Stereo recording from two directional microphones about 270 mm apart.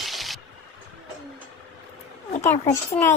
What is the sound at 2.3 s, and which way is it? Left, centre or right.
Speech, left.